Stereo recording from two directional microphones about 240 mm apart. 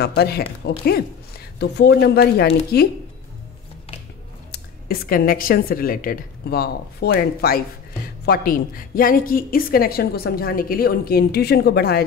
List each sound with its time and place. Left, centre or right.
0.0 s a woman's voice: left
4.5 s a woman's voice: left